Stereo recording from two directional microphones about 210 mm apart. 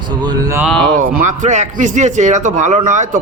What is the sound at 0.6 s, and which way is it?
Speech, centre (ahead or behind).